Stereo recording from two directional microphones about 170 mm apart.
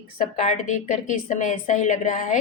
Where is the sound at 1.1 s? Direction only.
45° left (ahead or behind).